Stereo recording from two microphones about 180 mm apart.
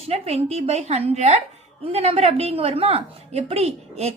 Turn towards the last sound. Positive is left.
turn(degrees=-35)  # may be behind; listen again after turning